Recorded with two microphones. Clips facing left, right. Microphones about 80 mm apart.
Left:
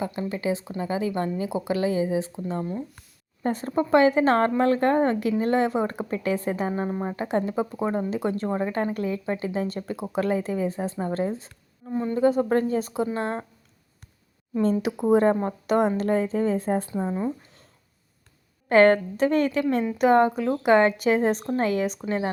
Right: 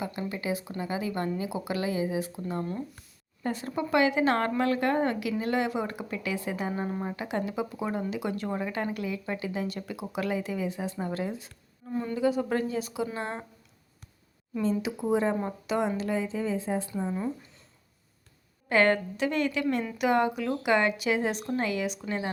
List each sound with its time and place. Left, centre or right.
0.0 s a woman's voice: left
3.4 s a woman's voice: left
11.9 s a woman's voice: left
12.1 s a woman's voice: left
14.6 s a woman's voice: left
16.9 s a woman's voice: left
18.7 s a woman's voice: left